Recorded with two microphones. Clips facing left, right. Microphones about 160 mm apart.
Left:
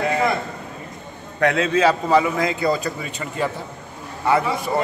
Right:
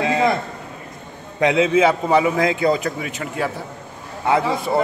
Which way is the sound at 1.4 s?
15° right (ahead or behind).